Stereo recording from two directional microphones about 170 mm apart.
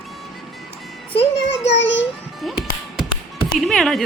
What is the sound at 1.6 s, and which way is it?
Child singing, 90° left.